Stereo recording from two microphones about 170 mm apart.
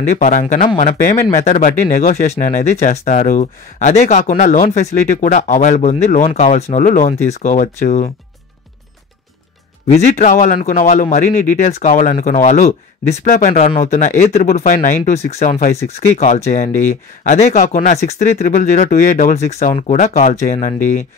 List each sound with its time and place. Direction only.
0.1 s speech: 45° left (ahead or behind)
9.8 s speech: 40° left (ahead or behind)